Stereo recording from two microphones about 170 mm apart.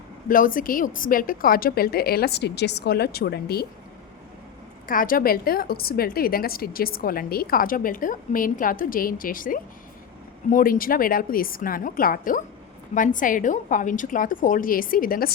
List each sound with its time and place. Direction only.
0.3 s a woman's voice: 55° left (ahead or behind)
4.9 s a woman's voice: 55° left (ahead or behind)